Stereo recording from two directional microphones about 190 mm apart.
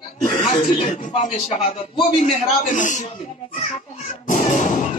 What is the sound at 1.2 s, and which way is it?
Speech, 35° left (ahead or behind).